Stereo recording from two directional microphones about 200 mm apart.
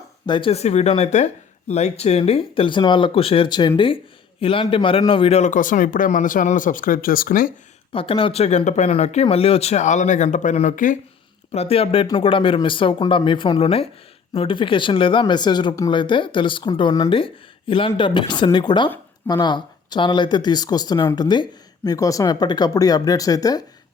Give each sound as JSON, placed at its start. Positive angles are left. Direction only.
{"t": 0.3, "sound": "speech", "side_deg": 25}
{"t": 7.9, "sound": "speech", "side_deg": 25}